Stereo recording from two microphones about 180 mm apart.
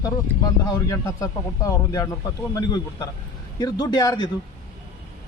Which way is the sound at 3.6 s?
20° left (ahead or behind).